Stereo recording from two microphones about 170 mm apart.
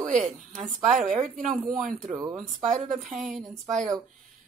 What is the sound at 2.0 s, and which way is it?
Speech, 20° right (ahead or behind).